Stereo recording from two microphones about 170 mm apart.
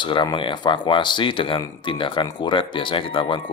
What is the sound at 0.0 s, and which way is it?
Speech, 25° left (ahead or behind).